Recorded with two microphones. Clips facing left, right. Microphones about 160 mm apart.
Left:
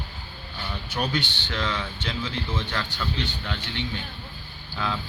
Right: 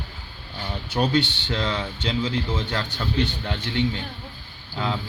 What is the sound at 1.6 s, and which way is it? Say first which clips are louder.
Speech: right 1 dB; 30° right (ahead or behind).